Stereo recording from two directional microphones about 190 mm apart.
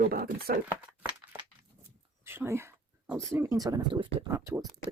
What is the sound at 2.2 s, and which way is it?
Speech, 10° right (ahead or behind).